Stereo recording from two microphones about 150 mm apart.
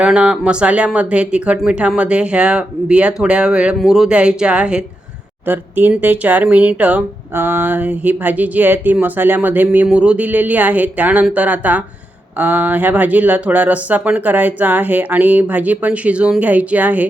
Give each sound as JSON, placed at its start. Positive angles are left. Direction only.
{"t": 0.0, "sound": "speech", "side_deg": -10}